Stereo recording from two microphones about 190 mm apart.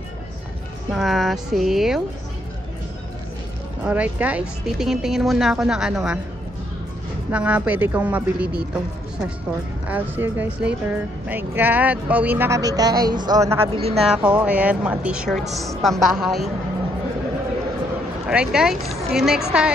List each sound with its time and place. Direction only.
0.9 s speech: centre (ahead or behind)
3.8 s speech: 10° right (ahead or behind)
7.2 s speech: 10° right (ahead or behind)
9.8 s speech: 10° right (ahead or behind)
13.7 s speech: 30° right (ahead or behind)
14.0 s speech: 5° right (ahead or behind)
18.2 s speech: 5° right (ahead or behind)